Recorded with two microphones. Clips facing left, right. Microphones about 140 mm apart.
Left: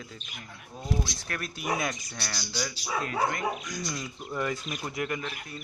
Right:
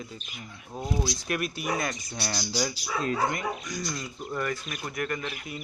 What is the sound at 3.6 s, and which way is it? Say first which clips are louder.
Speech: right 1 dB; centre (ahead or behind).